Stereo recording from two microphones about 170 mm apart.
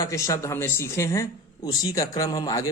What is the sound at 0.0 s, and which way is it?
Speech, 20° left (ahead or behind).